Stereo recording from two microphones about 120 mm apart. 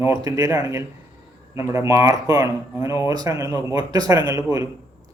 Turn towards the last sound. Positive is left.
turn(degrees=-25)  # may be behind; listen again after turning